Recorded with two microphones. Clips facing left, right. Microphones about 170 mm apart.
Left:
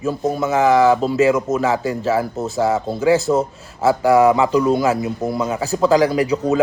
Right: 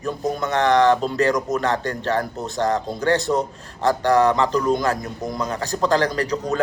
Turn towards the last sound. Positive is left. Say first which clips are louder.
# left 6 dB
turn(degrees=5)  # may be behind; listen again after turning